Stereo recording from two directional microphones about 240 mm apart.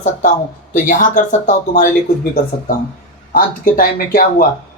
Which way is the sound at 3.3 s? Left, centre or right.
Left.